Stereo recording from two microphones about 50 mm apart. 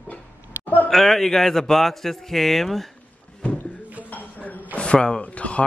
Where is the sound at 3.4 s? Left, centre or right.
Left.